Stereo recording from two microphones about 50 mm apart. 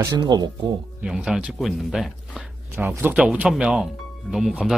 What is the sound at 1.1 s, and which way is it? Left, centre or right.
Speech, centre.